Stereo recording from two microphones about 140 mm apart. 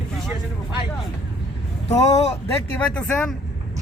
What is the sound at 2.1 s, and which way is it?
Speech, 45° left (ahead or behind).